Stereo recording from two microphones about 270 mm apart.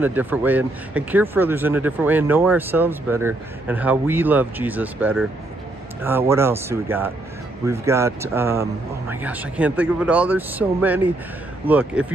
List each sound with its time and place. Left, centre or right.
0.0 s speech: centre